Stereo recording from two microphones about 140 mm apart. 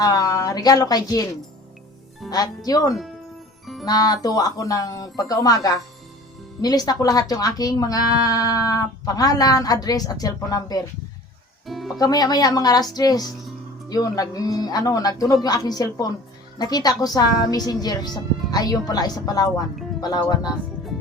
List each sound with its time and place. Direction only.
0.0 s speech: 25° left (ahead or behind)
2.3 s speech: 25° left (ahead or behind)
11.6 s music: centre (ahead or behind)
11.9 s speech: 30° left (ahead or behind)